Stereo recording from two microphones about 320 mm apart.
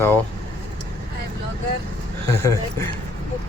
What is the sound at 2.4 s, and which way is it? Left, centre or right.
Speech, centre.